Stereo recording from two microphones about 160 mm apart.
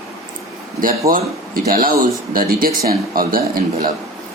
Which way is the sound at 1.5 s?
60° right (ahead or behind).